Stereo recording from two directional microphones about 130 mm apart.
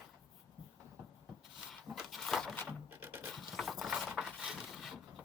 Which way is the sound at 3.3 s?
Centre (ahead or behind).